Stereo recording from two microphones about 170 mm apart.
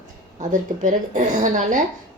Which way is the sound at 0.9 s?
45° right (ahead or behind).